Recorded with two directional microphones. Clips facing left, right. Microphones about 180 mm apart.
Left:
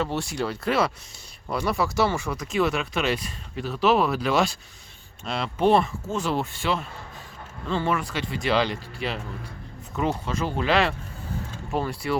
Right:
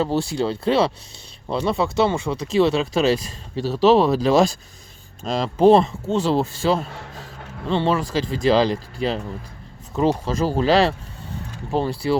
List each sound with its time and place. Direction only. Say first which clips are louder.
0.0 s speech: right 6 dB; 30° right (ahead or behind)